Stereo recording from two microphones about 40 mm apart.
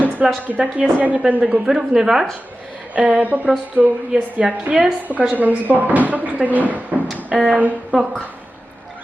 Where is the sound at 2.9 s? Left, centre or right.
Right.